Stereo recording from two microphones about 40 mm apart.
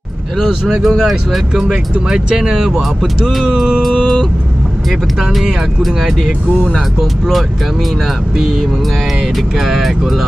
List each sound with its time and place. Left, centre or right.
0.7 s speech: centre
1.5 s speech: centre
5.8 s speech: centre
9.7 s speech: centre